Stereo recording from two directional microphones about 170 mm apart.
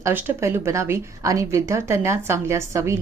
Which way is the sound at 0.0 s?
10° right (ahead or behind).